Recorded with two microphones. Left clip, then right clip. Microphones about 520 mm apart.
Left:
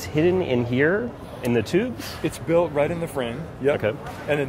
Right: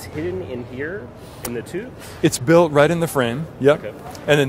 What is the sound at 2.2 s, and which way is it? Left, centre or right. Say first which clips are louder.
Speech: right 7 dB; right.